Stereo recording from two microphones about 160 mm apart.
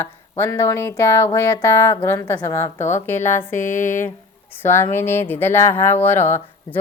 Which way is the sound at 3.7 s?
50° left (ahead or behind).